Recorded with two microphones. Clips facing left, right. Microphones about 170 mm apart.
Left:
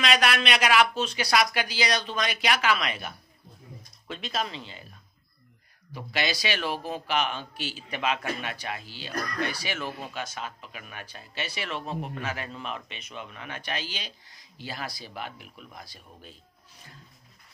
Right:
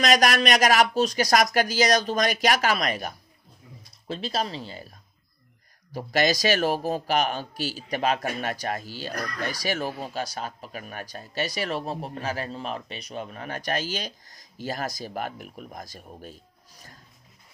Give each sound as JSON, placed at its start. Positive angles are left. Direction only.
{"t": 0.0, "sound": "a man's voice", "side_deg": -40}